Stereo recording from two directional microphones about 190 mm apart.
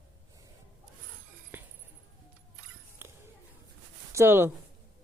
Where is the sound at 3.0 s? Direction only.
10° right (ahead or behind).